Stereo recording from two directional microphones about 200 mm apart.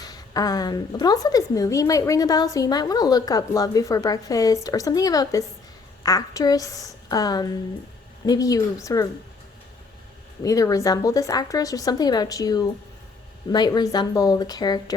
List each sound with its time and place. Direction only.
0.0 s a woman's voice: 20° left (ahead or behind)
10.4 s a woman's voice: 15° left (ahead or behind)